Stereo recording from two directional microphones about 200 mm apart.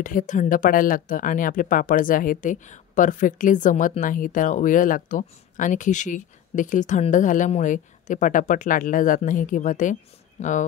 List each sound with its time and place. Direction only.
0.0 s speech: 40° left (ahead or behind)